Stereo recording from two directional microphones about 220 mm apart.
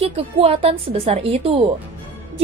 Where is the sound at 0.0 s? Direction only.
25° right (ahead or behind).